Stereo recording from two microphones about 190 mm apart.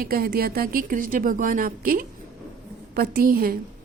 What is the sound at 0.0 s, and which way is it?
A woman's voice, 50° right (ahead or behind).